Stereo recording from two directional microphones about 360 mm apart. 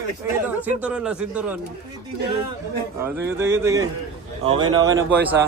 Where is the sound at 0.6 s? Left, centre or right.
Centre.